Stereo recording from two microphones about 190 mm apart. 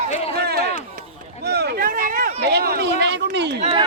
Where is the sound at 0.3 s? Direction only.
55° right (ahead or behind).